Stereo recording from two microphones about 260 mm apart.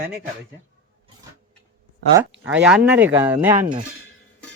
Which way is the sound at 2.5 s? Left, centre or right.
Centre.